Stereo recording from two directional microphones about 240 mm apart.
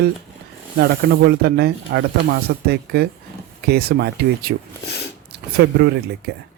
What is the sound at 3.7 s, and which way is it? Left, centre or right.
Speech, right.